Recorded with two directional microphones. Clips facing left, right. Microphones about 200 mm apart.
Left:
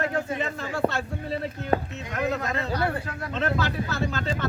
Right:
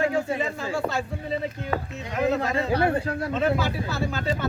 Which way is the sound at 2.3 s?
30° right (ahead or behind).